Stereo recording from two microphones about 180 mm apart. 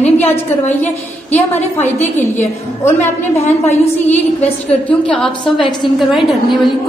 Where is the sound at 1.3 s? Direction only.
10° left (ahead or behind).